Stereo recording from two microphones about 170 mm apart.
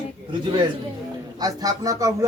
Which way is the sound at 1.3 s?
20° right (ahead or behind).